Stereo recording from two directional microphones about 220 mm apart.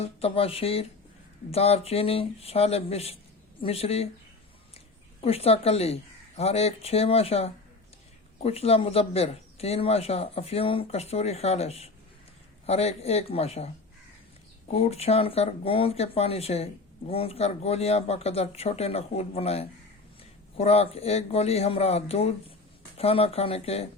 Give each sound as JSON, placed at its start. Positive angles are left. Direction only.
{"t": 0.0, "sound": "speech", "side_deg": 25}
{"t": 5.2, "sound": "speech", "side_deg": 25}
{"t": 14.7, "sound": "speech", "side_deg": 30}